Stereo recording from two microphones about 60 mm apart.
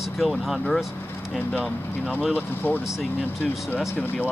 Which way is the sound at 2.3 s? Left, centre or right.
Left.